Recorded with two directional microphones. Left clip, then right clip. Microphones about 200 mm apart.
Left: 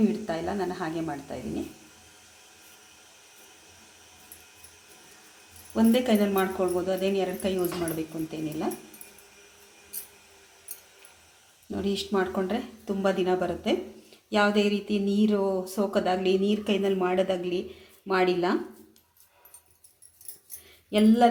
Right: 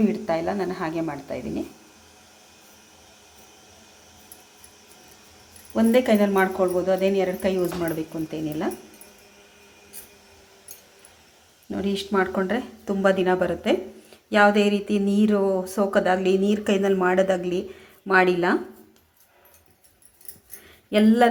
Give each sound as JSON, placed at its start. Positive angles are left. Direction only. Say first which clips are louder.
{"t": 0.1, "sound": "a woman's voice", "louder": "right 6 dB", "side_deg": -20}
{"t": 5.7, "sound": "a woman's voice", "louder": "right 5 dB", "side_deg": -20}
{"t": 11.7, "sound": "a woman's voice", "louder": "right 3 dB", "side_deg": -15}
{"t": 20.9, "sound": "a woman's voice", "louder": "right 3 dB", "side_deg": -20}